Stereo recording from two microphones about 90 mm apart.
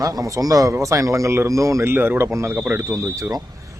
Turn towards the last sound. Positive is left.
turn(degrees=-35)  # may be behind; listen again after turning